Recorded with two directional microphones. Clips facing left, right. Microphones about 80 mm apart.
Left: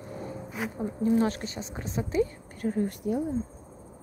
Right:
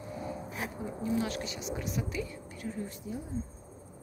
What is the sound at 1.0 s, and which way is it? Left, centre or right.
Speech, left.